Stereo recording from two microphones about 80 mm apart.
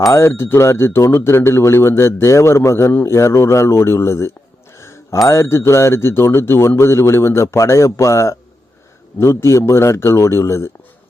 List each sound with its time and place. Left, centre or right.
0.1 s speech: left
4.8 s a sound: left
5.3 s speech: left